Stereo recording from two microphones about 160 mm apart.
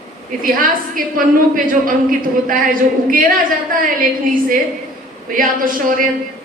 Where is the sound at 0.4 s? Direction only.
60° right (ahead or behind).